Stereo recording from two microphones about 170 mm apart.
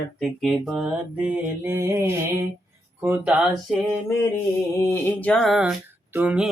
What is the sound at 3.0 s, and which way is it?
Speech, 10° right (ahead or behind).